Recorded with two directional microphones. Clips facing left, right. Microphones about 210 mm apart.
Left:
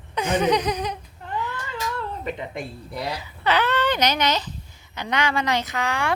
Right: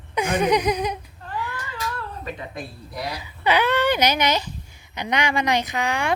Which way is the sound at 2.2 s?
20° left (ahead or behind).